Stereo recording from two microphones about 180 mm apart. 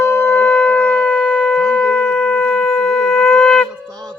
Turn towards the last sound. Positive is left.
turn(degrees=5)  # may be behind; listen again after turning